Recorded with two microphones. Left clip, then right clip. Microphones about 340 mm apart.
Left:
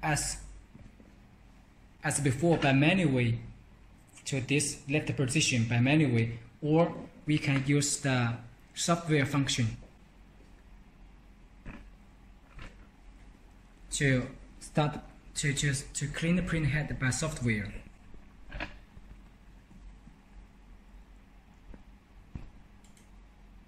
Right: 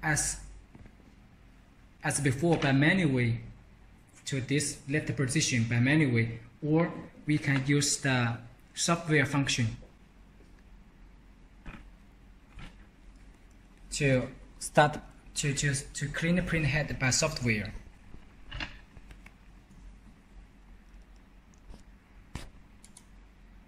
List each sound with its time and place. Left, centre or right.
2.0 s speech: centre
13.8 s a man's voice: centre
14.6 s speech: centre
15.3 s speech: centre